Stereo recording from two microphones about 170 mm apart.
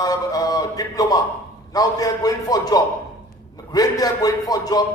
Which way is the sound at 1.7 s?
20° left (ahead or behind).